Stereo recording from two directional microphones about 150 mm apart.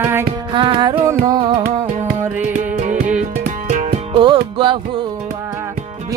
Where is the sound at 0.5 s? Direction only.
30° right (ahead or behind).